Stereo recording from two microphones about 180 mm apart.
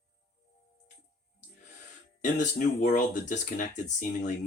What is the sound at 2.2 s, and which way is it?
Speech, 45° left (ahead or behind).